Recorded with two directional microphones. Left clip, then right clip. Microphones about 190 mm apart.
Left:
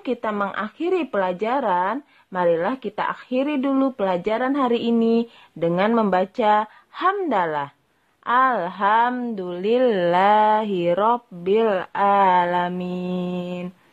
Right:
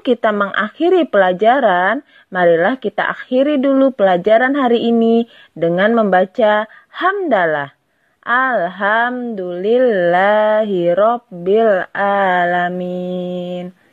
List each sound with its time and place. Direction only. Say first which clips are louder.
0.0 s a woman's voice: right 9 dB; 30° right (ahead or behind); by 13.7 s 10° right (ahead or behind)